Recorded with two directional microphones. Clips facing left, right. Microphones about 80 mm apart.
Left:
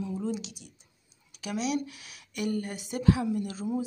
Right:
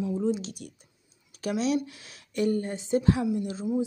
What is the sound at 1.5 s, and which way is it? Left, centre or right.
Speech, right.